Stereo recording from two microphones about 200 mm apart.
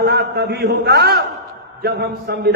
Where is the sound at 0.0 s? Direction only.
55° right (ahead or behind).